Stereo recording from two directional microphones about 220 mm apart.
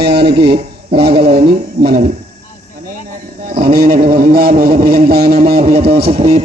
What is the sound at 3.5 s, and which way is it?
A man's voice, 45° right (ahead or behind).